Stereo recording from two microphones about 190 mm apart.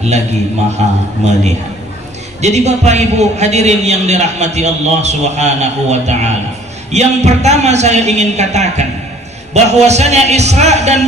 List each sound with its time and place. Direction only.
1.2 s a man's voice: 35° right (ahead or behind)
2.4 s a man's voice: 35° right (ahead or behind)